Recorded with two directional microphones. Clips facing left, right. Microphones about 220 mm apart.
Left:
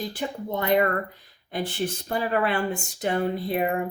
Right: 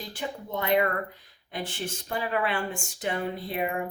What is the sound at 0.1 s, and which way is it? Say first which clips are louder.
A woman's voice: left 4 dB; 35° left (ahead or behind).